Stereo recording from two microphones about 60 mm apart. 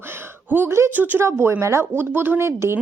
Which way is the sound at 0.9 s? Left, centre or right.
Right.